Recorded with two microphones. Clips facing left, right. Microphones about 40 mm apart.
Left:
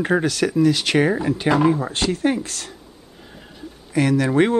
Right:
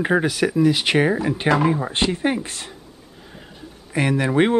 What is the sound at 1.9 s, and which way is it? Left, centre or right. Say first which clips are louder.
Speech: even; right.